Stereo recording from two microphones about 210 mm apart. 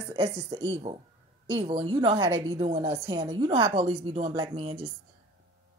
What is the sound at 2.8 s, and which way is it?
Speech, 15° right (ahead or behind).